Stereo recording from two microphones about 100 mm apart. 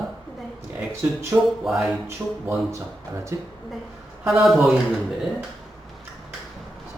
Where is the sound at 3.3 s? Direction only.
30° right (ahead or behind).